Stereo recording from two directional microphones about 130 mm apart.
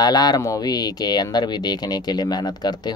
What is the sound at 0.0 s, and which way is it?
Speech, 30° left (ahead or behind).